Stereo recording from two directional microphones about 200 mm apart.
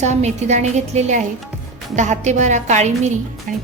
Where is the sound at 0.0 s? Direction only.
35° right (ahead or behind).